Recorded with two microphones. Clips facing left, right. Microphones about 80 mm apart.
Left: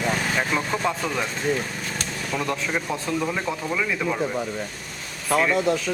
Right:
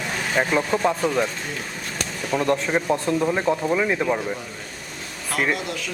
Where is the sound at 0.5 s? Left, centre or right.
Centre.